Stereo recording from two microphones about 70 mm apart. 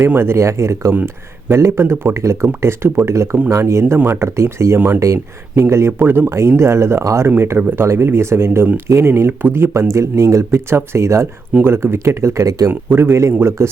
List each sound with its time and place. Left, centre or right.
0.0 s speech: right
6.6 s speech: right
12.9 s speech: right